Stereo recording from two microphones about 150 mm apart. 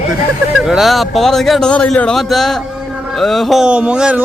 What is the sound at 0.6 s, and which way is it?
A man's voice, centre (ahead or behind).